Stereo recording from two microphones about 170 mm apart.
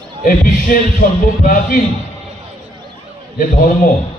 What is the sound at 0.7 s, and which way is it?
A man's voice, 55° left (ahead or behind).